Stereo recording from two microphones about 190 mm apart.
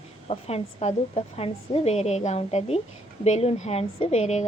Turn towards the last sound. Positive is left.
turn(degrees=35)  # may be behind; listen again after turning